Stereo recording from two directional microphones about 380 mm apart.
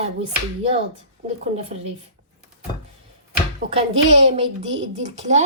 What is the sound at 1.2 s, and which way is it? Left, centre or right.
Speech, centre.